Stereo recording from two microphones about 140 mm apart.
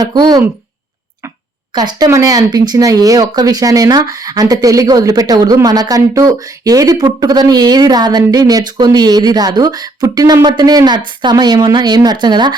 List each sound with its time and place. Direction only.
0.0 s speech: 30° right (ahead or behind)
1.7 s speech: 30° right (ahead or behind)